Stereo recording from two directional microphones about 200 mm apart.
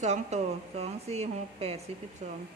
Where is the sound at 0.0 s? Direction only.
35° right (ahead or behind).